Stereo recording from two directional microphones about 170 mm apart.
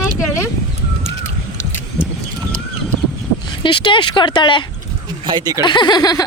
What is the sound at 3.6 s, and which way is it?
Speech, 30° left (ahead or behind).